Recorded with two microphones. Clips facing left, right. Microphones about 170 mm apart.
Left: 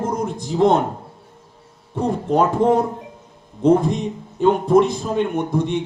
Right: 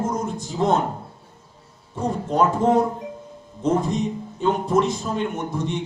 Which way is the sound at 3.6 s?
55° left (ahead or behind).